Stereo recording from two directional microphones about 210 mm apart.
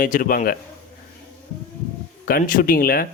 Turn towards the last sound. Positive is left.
turn(degrees=45)  # may be behind; listen again after turning